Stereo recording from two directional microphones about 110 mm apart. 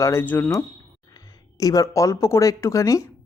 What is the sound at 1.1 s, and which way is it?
Speech, 30° left (ahead or behind).